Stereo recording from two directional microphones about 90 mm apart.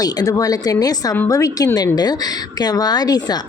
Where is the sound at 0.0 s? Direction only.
45° left (ahead or behind).